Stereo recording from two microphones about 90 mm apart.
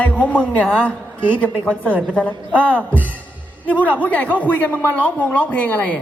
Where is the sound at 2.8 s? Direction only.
20° right (ahead or behind).